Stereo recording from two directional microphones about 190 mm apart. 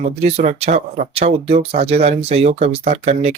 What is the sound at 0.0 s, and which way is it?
Speech, 35° right (ahead or behind).